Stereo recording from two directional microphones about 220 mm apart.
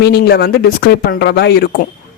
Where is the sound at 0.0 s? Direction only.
45° left (ahead or behind).